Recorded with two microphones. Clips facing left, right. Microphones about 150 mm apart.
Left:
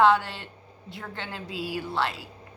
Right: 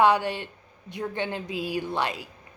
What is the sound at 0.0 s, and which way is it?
A woman's voice, 15° right (ahead or behind).